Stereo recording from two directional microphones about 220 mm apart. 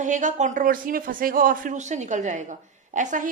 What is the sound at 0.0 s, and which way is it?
A woman's voice, 35° right (ahead or behind).